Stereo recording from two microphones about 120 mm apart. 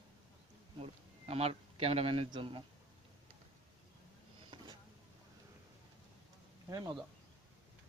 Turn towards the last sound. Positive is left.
turn(degrees=-30)  # may be behind; listen again after turning